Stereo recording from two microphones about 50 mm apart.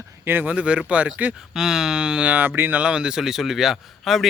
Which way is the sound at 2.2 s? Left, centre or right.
Right.